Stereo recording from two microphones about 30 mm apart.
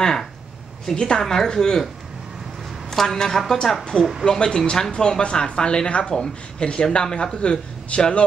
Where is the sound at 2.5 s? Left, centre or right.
Centre.